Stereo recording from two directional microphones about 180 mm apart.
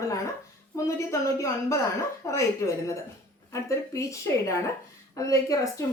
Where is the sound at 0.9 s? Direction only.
15° left (ahead or behind).